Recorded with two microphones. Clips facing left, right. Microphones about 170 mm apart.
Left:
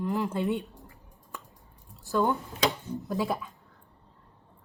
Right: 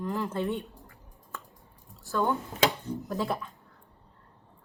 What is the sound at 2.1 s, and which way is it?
Speech, 15° left (ahead or behind).